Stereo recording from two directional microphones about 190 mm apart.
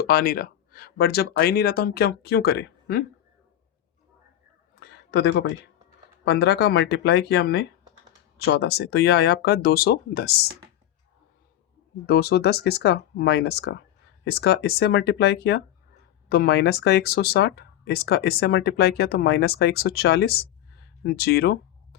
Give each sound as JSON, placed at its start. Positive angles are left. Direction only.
{"t": 0.1, "sound": "speech", "side_deg": 50}
{"t": 4.7, "sound": "a sound", "side_deg": 60}
{"t": 6.2, "sound": "speech", "side_deg": 60}
{"t": 12.0, "sound": "speech", "side_deg": 55}